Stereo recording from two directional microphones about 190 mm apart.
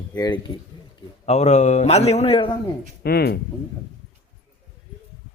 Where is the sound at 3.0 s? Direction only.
55° left (ahead or behind).